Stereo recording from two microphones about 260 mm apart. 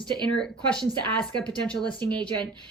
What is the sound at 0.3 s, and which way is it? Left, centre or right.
Speech, centre.